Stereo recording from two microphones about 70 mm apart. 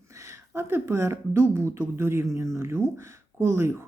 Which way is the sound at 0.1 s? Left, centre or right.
Right.